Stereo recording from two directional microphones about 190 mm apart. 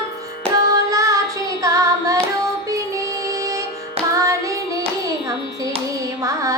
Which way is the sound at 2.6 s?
15° right (ahead or behind).